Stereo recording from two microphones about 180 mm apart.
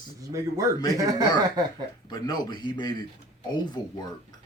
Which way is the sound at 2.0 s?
25° left (ahead or behind).